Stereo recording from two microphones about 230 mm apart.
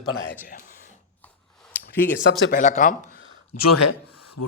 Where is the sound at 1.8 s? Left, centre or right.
Left.